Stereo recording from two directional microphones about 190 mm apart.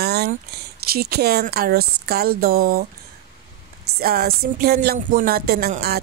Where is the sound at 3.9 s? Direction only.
55° right (ahead or behind).